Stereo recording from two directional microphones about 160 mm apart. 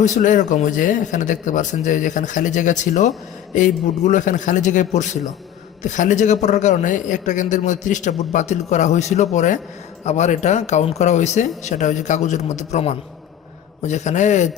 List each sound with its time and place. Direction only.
0.0 s a man's voice: 50° left (ahead or behind)